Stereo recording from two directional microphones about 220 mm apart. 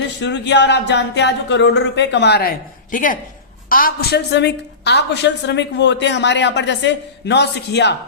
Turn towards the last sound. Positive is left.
turn(degrees=50)  # may be behind; listen again after turning